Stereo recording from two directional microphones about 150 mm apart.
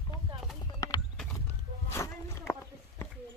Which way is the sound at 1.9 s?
15° left (ahead or behind).